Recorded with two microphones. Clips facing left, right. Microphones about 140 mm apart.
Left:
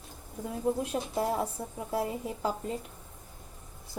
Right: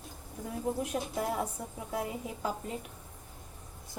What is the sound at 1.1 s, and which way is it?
A woman's voice, 30° left (ahead or behind).